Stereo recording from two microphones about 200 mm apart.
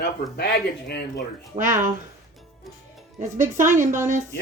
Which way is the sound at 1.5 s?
40° right (ahead or behind).